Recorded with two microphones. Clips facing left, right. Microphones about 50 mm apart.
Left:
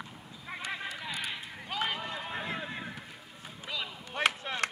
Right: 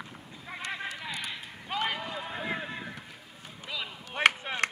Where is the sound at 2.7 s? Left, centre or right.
Centre.